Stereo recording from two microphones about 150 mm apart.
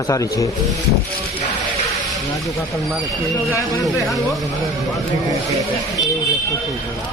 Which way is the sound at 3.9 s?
Centre (ahead or behind).